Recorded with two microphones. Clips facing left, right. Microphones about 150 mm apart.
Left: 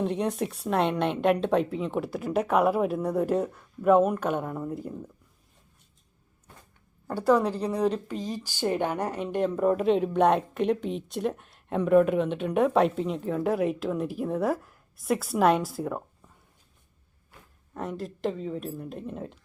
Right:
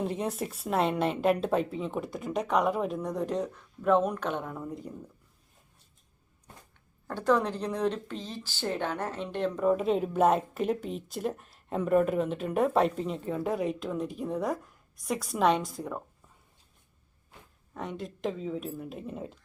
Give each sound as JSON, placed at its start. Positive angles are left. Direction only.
{"t": 0.0, "sound": "a woman's voice", "side_deg": 0}
{"t": 7.1, "sound": "a woman's voice", "side_deg": 10}
{"t": 17.7, "sound": "a woman's voice", "side_deg": 0}